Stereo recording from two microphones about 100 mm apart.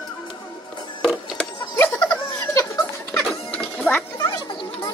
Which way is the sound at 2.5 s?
35° left (ahead or behind).